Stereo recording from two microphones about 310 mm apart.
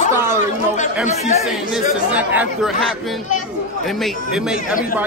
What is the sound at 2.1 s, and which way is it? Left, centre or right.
Speech, centre.